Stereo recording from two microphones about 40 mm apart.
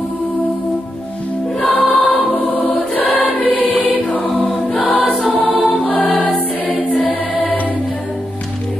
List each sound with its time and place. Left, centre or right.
1.6 s music: left
2.1 s choir: left
5.6 s music: left
7.1 s choir: left